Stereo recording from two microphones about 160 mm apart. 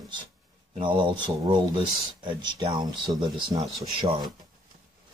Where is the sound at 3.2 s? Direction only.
Centre (ahead or behind).